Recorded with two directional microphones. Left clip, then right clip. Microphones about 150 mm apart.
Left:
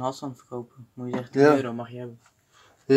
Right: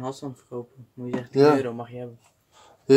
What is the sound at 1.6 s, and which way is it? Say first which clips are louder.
Speech: right 1 dB; 45° left (ahead or behind).